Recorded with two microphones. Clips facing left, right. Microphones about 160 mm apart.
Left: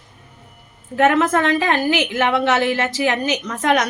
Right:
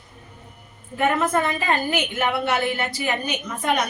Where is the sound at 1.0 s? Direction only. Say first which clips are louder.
Left 5 dB; 90° left.